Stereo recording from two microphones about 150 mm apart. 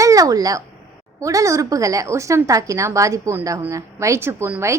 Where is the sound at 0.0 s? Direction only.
20° right (ahead or behind).